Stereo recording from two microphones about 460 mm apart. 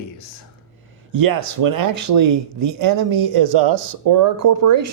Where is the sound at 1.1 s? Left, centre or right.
Right.